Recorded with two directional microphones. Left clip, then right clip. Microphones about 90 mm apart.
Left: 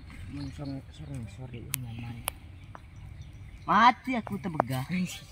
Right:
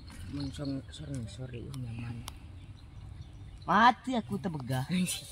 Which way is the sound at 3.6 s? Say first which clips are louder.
Left 2 dB; 25° right (ahead or behind).